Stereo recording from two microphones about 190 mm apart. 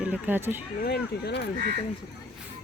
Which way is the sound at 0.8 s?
60° left (ahead or behind).